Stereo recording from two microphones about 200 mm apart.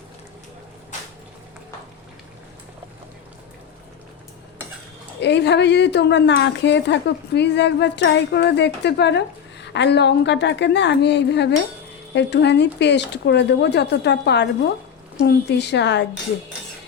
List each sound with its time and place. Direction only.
5.2 s a woman's voice: 60° left (ahead or behind)